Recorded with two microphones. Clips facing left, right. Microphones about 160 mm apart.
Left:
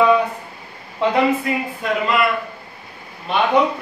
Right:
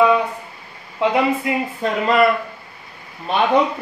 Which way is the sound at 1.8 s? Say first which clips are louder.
Right 3 dB; 40° right (ahead or behind).